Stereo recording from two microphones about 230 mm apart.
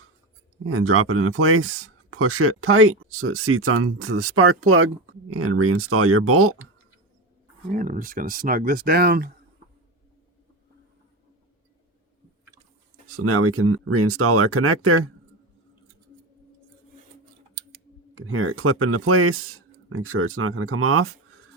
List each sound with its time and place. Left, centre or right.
0.6 s speech: right
7.7 s speech: right
13.1 s speech: right
18.1 s speech: right